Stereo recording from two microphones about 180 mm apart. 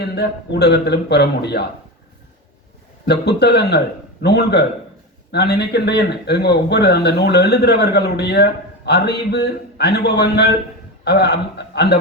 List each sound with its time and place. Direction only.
0.0 s speech: 65° left (ahead or behind)
3.1 s speech: 65° left (ahead or behind)